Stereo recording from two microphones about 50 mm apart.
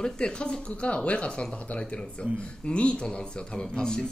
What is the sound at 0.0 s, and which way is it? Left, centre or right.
Speech, centre.